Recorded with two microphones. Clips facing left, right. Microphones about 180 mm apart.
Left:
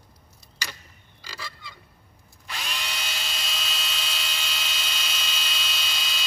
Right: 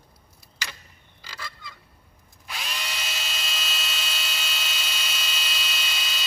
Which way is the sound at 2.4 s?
5° right (ahead or behind).